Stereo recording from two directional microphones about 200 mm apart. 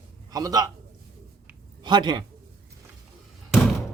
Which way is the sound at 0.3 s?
20° right (ahead or behind).